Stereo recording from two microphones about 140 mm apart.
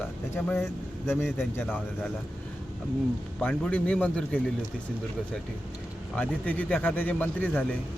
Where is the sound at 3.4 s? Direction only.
10° left (ahead or behind).